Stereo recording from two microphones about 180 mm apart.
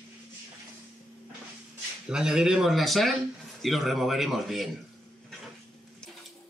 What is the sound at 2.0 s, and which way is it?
Speech, 5° right (ahead or behind).